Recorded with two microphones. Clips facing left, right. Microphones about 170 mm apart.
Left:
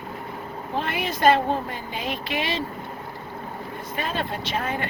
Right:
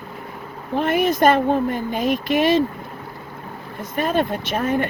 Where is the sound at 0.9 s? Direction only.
45° right (ahead or behind).